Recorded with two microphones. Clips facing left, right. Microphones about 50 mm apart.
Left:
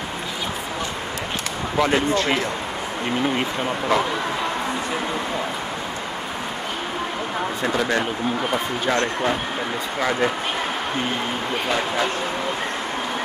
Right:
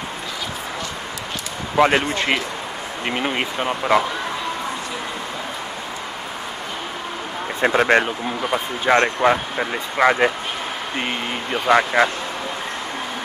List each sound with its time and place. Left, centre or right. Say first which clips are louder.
1.8 s speech: right 3 dB; right
7.6 s speech: right 7 dB; right
11.6 s speech: right 9 dB; right